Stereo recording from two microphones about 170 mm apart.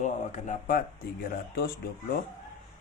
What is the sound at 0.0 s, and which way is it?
Speech, 45° left (ahead or behind).